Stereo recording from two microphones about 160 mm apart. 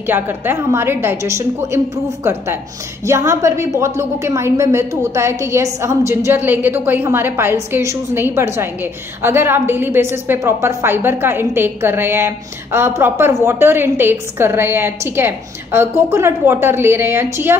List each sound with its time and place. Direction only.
0.0 s a woman's voice: 15° right (ahead or behind)